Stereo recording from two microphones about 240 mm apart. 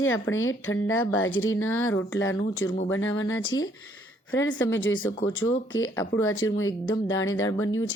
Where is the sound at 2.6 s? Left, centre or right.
Left.